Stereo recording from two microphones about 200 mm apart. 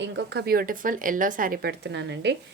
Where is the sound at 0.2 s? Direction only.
55° right (ahead or behind).